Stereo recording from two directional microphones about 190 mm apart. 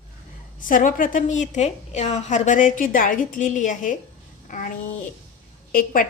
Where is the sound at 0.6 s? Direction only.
45° left (ahead or behind).